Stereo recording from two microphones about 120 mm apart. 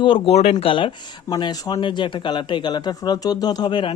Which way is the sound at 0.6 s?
45° left (ahead or behind).